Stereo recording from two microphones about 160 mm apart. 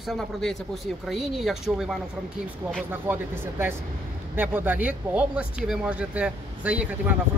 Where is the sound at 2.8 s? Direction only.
15° right (ahead or behind).